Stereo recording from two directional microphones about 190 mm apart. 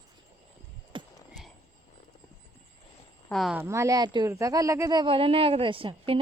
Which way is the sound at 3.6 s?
15° right (ahead or behind).